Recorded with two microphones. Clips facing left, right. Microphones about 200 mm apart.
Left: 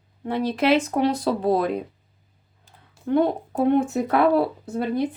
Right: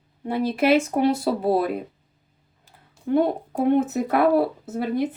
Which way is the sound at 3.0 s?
5° right (ahead or behind).